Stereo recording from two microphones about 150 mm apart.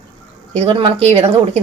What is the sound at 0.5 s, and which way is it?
Speech, 40° right (ahead or behind).